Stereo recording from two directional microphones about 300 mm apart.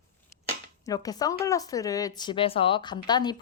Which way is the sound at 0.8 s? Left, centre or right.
Centre.